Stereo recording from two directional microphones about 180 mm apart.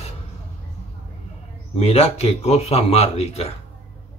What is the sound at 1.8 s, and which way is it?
Speech, 35° left (ahead or behind).